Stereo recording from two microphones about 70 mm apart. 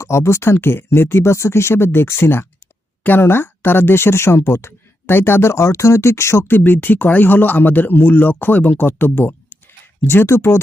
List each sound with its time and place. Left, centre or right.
0.0 s speech: left
6.5 s speech: left